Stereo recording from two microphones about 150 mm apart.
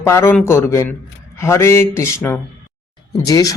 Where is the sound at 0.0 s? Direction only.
15° left (ahead or behind).